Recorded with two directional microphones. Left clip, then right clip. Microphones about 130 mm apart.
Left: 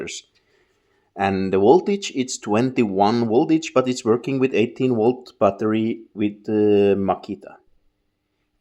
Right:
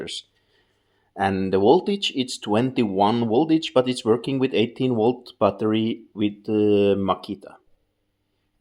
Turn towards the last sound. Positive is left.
turn(degrees=15)  # may be behind; listen again after turning